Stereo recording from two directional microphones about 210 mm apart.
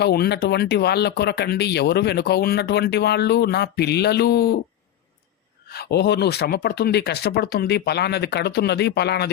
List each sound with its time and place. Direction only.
0.0 s speech: 50° left (ahead or behind)
5.7 s speech: 50° left (ahead or behind)